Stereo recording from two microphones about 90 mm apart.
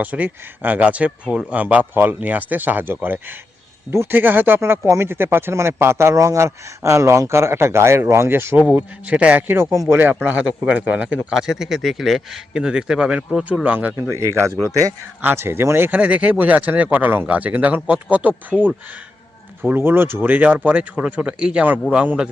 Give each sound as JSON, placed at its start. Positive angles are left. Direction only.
{"t": 0.0, "sound": "speech", "side_deg": -20}
{"t": 9.0, "sound": "speech", "side_deg": -15}
{"t": 11.3, "sound": "speech", "side_deg": -5}
{"t": 13.7, "sound": "speech", "side_deg": -20}
{"t": 14.1, "sound": "speech", "side_deg": -30}
{"t": 15.2, "sound": "speech", "side_deg": -25}